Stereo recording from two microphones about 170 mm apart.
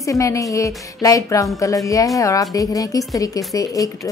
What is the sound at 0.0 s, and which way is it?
A woman's voice, 20° left (ahead or behind).